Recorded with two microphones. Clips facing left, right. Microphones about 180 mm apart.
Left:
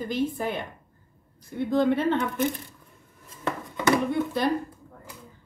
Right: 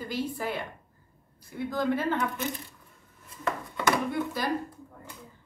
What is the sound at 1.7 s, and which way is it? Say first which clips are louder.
Speech: left 6 dB; 25° left (ahead or behind).